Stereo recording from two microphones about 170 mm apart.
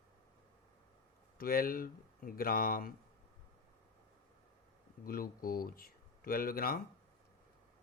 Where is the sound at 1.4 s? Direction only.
60° left (ahead or behind).